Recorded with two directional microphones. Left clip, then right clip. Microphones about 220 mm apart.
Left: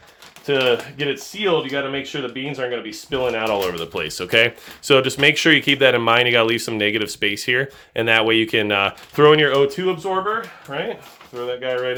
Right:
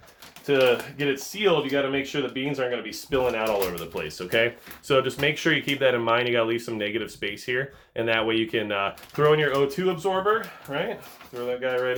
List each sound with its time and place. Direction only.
0.4 s speech: 30° left (ahead or behind)
3.7 s speech: 45° left (ahead or behind); by 11.9 s 30° left (ahead or behind)